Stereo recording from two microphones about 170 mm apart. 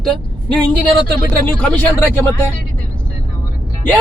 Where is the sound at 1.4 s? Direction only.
10° left (ahead or behind).